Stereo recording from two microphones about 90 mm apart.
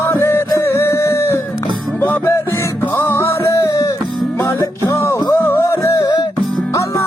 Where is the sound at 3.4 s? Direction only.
40° left (ahead or behind).